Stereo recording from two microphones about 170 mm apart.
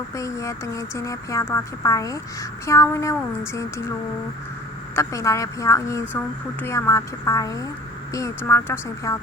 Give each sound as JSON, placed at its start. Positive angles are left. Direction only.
{"t": 0.2, "sound": "a woman's voice", "side_deg": 15}
{"t": 4.9, "sound": "a woman's voice", "side_deg": 20}